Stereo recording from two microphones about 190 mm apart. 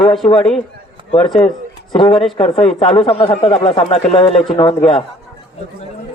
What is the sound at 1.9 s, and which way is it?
A man's voice, 25° left (ahead or behind).